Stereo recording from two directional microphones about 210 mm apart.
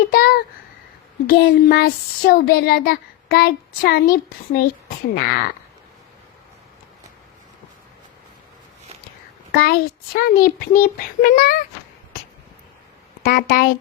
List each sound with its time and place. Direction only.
0.1 s speech: 45° left (ahead or behind)
9.5 s speech: 45° left (ahead or behind)
13.2 s speech: 40° left (ahead or behind)